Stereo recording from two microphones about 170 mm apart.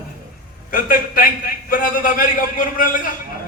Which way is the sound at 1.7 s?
55° left (ahead or behind).